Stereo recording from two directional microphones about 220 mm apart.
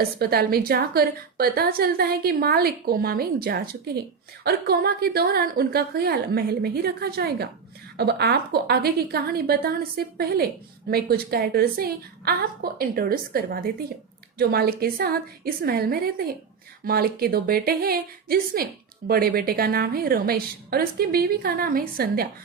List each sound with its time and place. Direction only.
0.0 s a woman's voice: 45° right (ahead or behind)